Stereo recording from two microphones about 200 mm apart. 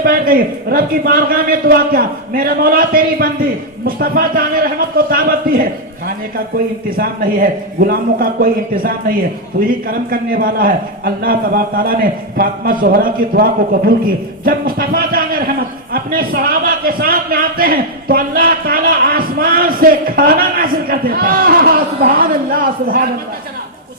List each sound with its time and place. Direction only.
0.0 s a man's voice: 45° right (ahead or behind)
6.9 s a man's voice: 45° right (ahead or behind)